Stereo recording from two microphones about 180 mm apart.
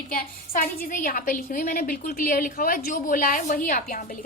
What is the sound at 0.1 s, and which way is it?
A woman's voice, 50° left (ahead or behind).